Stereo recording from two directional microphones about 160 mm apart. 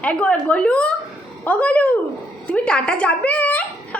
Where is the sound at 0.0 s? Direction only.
10° left (ahead or behind).